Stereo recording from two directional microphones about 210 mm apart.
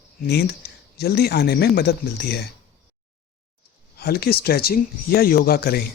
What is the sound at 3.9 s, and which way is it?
Speech, 50° left (ahead or behind).